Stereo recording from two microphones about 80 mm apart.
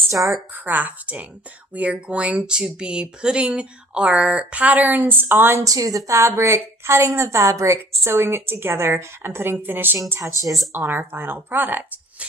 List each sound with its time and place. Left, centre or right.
0.5 s speech: right
5.6 s a woman's voice: right
10.1 s a woman's voice: right
10.7 s speech: right